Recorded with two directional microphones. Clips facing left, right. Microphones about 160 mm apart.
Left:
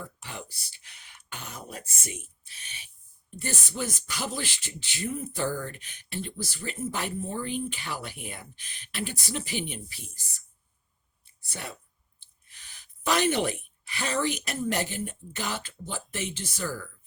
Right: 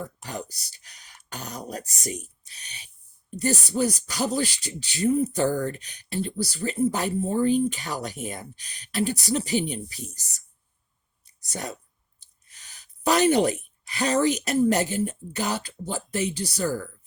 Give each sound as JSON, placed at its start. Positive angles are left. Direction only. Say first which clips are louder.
{"t": 0.0, "sound": "speech", "louder": "right 6 dB", "side_deg": -40}